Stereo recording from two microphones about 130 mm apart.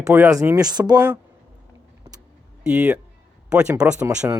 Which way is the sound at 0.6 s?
30° right (ahead or behind).